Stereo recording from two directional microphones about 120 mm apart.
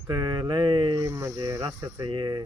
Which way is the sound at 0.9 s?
25° right (ahead or behind).